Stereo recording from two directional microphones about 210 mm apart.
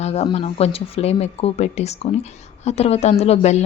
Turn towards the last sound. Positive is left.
turn(degrees=30)  # may be behind; listen again after turning